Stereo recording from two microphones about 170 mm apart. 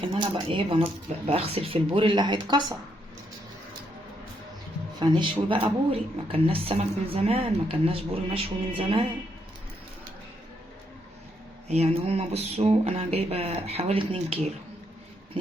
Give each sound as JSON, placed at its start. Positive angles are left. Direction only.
{"t": 0.1, "sound": "speech", "side_deg": -30}
{"t": 4.9, "sound": "speech", "side_deg": -30}
{"t": 11.7, "sound": "speech", "side_deg": -35}